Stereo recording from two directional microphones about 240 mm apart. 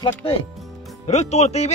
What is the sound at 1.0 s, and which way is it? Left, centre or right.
Speech, left.